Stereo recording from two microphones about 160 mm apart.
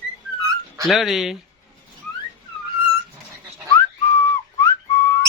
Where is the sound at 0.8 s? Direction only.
Centre (ahead or behind).